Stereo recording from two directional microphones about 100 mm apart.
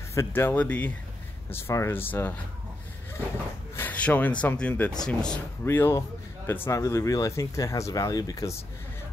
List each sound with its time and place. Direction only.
0.1 s speech: 25° left (ahead or behind)
1.5 s speech: 25° left (ahead or behind)
3.7 s a sound: 15° left (ahead or behind)
4.4 s speech: 10° left (ahead or behind)
5.7 s a man's voice: 25° left (ahead or behind)